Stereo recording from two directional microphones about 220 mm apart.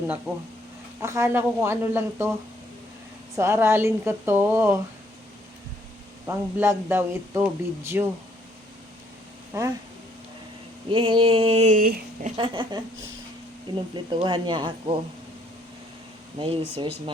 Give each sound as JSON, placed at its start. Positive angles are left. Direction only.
{"t": 1.0, "sound": "speech", "side_deg": -10}
{"t": 3.3, "sound": "speech", "side_deg": -10}
{"t": 6.2, "sound": "speech", "side_deg": -10}
{"t": 9.5, "sound": "speech", "side_deg": -15}
{"t": 10.8, "sound": "speech", "side_deg": -20}
{"t": 12.4, "sound": "speech", "side_deg": -20}
{"t": 16.4, "sound": "speech", "side_deg": -25}